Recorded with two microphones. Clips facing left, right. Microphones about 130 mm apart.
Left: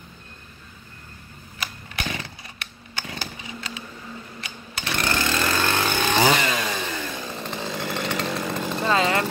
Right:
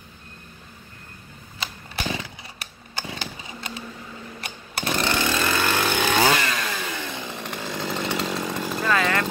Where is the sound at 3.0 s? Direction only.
20° right (ahead or behind).